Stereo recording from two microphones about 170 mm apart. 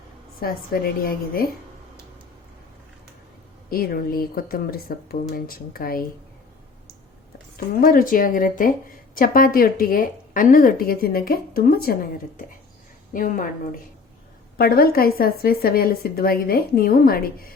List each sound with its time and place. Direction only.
0.3 s a woman's voice: 60° left (ahead or behind)
3.7 s a woman's voice: 60° left (ahead or behind)
7.7 s a woman's voice: 60° left (ahead or behind)